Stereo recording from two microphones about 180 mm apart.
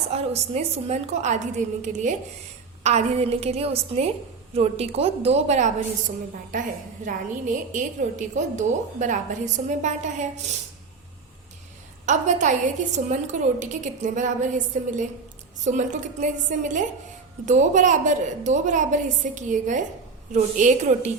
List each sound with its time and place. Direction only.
0.1 s a woman's voice: 35° right (ahead or behind)
12.0 s a woman's voice: 40° right (ahead or behind)